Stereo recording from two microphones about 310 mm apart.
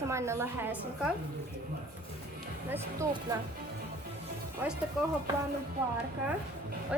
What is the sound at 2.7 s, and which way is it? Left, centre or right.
Speech, centre.